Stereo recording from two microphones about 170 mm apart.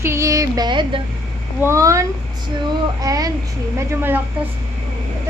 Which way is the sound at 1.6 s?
15° right (ahead or behind).